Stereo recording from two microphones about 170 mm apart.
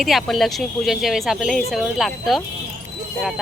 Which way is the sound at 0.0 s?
Centre (ahead or behind).